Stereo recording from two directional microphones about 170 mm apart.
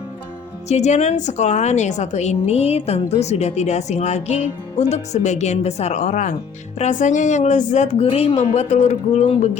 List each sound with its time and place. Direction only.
0.7 s a woman's voice: 40° left (ahead or behind)